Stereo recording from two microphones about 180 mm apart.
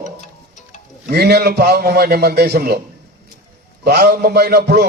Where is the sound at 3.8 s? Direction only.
65° right (ahead or behind).